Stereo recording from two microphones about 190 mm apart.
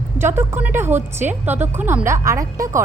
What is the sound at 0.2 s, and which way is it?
A woman's voice, 10° right (ahead or behind).